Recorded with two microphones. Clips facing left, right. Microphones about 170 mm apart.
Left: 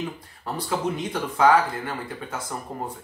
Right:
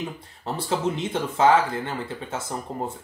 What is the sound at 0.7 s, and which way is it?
Speech, 25° right (ahead or behind).